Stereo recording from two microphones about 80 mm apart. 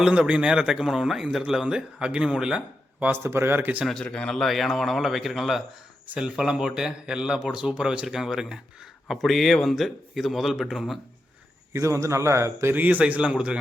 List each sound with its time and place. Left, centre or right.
0.0 s a man's voice: centre
3.0 s speech: right
3.8 s a man's voice: centre
11.7 s speech: right
12.7 s a man's voice: right